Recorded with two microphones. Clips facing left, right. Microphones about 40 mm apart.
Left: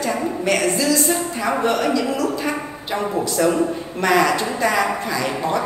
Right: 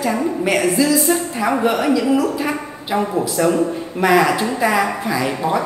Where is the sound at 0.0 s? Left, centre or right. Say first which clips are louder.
Right 3 dB; centre.